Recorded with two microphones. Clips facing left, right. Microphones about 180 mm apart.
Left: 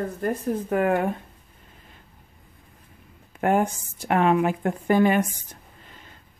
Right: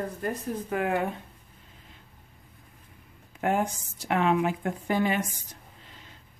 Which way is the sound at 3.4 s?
55° left (ahead or behind).